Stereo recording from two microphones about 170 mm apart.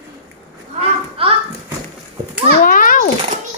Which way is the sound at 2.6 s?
55° left (ahead or behind).